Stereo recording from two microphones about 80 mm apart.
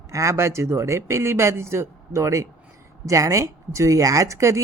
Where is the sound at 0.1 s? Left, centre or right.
Right.